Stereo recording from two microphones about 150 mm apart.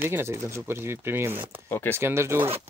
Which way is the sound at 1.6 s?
20° left (ahead or behind).